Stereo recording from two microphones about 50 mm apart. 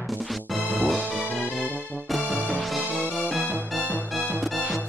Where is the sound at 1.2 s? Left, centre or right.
Left.